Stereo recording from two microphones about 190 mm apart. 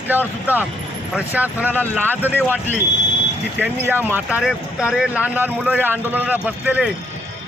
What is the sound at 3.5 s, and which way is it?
Speech, 10° right (ahead or behind).